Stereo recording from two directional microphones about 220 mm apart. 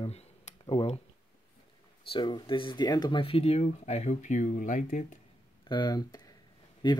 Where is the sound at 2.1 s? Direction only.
20° left (ahead or behind).